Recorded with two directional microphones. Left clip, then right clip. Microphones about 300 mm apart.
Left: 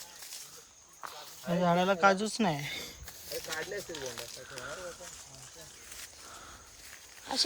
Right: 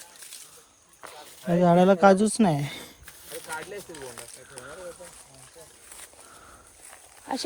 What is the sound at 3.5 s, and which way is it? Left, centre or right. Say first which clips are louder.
Speech: right 2 dB; centre.